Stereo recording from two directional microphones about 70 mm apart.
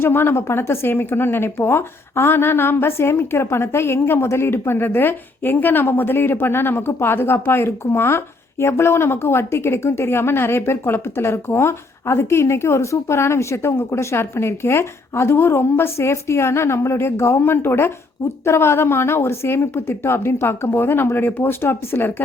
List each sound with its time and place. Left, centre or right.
0.0 s speech: left